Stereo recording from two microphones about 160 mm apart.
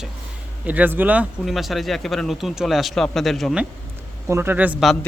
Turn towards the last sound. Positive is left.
turn(degrees=-5)  # may be behind; listen again after turning